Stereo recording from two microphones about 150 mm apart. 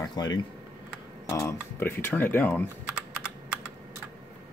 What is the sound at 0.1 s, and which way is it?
Speech, 25° left (ahead or behind).